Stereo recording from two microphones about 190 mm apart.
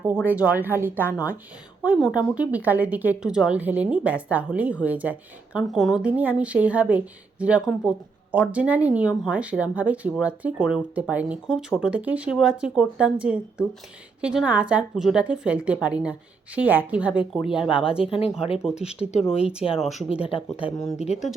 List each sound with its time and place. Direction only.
0.0 s a woman's voice: 10° right (ahead or behind)
18.0 s speech: 30° left (ahead or behind)
18.6 s a woman's voice: 5° right (ahead or behind)
18.9 s speech: 35° left (ahead or behind)